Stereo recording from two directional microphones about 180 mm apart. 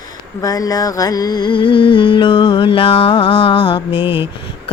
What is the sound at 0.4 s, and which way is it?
Music, 20° left (ahead or behind).